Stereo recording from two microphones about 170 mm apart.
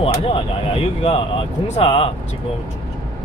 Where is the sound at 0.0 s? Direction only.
35° left (ahead or behind).